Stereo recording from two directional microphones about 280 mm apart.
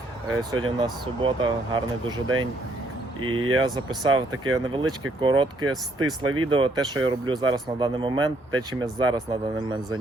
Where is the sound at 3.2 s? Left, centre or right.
Right.